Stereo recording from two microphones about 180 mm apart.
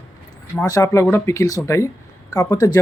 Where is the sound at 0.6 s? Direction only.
20° left (ahead or behind).